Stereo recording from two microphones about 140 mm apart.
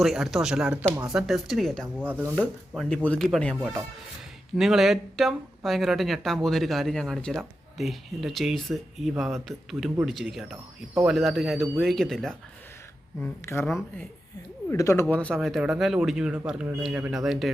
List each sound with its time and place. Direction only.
0.0 s speech: centre (ahead or behind)
2.0 s speech: 10° right (ahead or behind)
2.3 s speech: 5° left (ahead or behind)
13.2 s speech: 20° left (ahead or behind)
14.7 s speech: 20° left (ahead or behind)
15.0 s speech: 10° left (ahead or behind)